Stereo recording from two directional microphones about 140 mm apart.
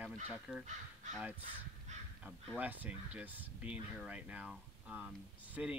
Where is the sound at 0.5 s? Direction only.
Centre (ahead or behind).